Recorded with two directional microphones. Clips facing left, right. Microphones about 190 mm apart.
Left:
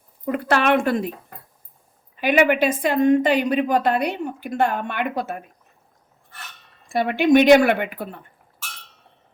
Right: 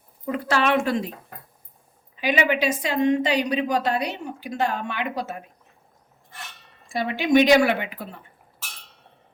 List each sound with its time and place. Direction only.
0.3 s a woman's voice: 55° left (ahead or behind)
2.1 s a woman's voice: 55° left (ahead or behind)
6.8 s a woman's voice: 60° left (ahead or behind)